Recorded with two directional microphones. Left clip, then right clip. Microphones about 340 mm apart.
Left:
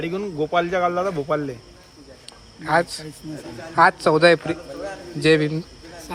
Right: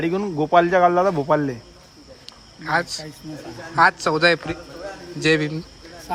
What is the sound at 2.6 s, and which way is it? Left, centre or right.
A man's voice, centre.